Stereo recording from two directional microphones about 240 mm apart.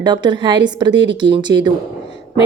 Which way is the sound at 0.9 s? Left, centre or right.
Right.